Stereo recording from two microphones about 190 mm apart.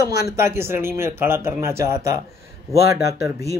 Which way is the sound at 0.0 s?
15° right (ahead or behind).